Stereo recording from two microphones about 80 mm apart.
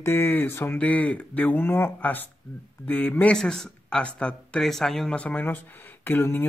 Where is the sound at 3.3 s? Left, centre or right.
Centre.